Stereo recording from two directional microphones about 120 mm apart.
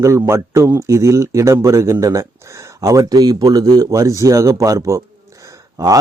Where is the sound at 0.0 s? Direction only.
25° right (ahead or behind).